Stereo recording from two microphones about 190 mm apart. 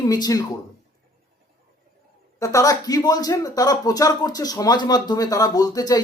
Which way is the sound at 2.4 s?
15° left (ahead or behind).